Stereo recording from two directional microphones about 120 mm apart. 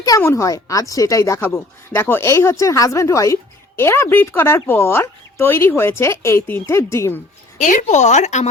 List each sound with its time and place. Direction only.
0.2 s speech: 25° left (ahead or behind)
7.6 s speech: 85° left